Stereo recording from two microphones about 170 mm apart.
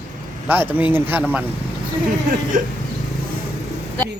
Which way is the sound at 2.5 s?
50° right (ahead or behind).